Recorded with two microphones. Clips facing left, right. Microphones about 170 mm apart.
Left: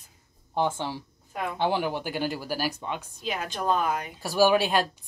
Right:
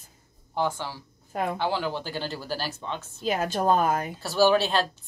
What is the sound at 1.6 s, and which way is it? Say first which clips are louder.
A woman's voice: left 2 dB; 20° left (ahead or behind).